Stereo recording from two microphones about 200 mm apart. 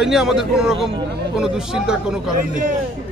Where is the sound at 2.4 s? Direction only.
40° right (ahead or behind).